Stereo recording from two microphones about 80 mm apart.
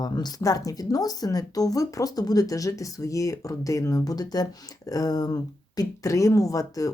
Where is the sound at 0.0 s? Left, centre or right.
Left.